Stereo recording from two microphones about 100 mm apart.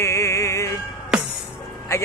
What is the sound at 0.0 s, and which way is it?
Music, 30° left (ahead or behind).